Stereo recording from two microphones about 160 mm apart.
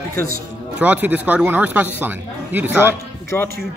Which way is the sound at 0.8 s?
10° right (ahead or behind).